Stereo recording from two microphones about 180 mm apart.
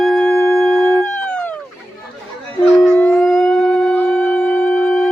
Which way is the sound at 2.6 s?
5° left (ahead or behind).